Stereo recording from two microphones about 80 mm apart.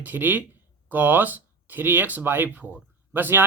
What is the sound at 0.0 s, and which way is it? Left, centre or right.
Speech, right.